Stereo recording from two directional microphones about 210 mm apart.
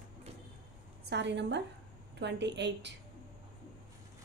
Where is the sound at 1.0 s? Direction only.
55° right (ahead or behind).